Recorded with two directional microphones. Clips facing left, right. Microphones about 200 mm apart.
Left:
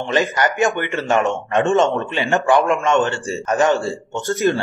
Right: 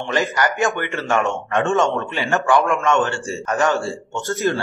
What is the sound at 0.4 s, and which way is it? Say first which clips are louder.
Speech: left 2 dB; 20° left (ahead or behind).